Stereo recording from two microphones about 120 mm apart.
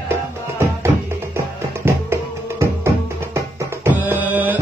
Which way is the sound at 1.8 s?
20° right (ahead or behind).